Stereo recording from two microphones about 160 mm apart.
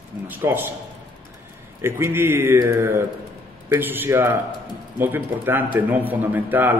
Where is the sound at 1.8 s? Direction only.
15° right (ahead or behind).